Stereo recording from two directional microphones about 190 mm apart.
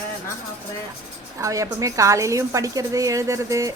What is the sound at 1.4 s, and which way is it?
A woman's voice, 15° right (ahead or behind).